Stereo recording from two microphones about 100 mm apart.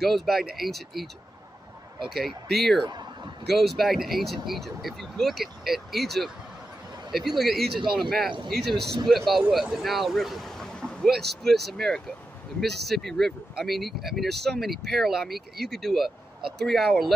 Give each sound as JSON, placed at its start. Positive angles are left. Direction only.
{"t": 0.0, "sound": "speech", "side_deg": 0}
{"t": 2.0, "sound": "speech", "side_deg": 0}
{"t": 2.8, "sound": "speech", "side_deg": -45}
{"t": 3.5, "sound": "speech", "side_deg": 0}